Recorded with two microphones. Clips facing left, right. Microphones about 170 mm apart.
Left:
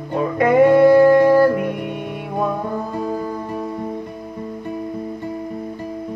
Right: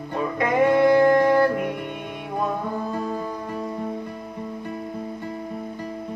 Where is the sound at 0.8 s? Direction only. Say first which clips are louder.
Left 6 dB; 35° left (ahead or behind).